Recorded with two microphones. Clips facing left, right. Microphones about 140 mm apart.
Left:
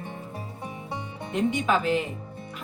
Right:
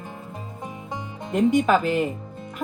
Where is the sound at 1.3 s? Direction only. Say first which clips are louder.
Right 6 dB; 45° right (ahead or behind).